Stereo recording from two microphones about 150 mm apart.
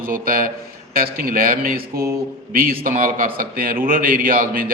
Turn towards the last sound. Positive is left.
turn(degrees=-75)  # may be behind; listen again after turning